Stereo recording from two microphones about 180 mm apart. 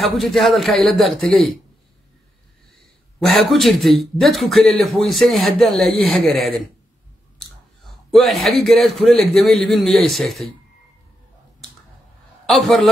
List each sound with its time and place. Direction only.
0.0 s speech: centre (ahead or behind)
3.2 s speech: centre (ahead or behind)
12.4 s speech: centre (ahead or behind)